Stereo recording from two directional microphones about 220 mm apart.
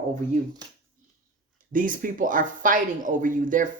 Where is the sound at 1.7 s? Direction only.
40° right (ahead or behind).